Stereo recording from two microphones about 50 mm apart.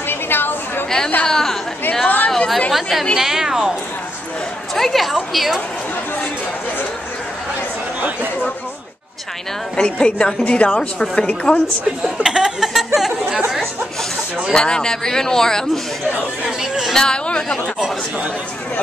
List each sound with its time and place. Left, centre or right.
0.1 s chatter: left
0.8 s chatter: centre
1.2 s a man's voice: centre
2.7 s a woman's voice: centre
4.7 s a woman's voice: centre
9.8 s a woman's voice: left
12.0 s speech: centre
12.6 s a sound: centre
14.5 s a man's voice: centre
16.4 s a sound: centre
16.9 s a man's voice: centre